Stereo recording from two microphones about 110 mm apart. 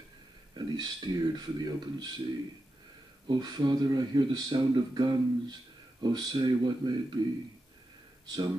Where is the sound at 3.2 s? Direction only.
40° right (ahead or behind).